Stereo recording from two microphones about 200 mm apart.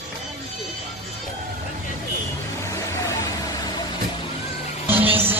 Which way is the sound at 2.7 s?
15° left (ahead or behind).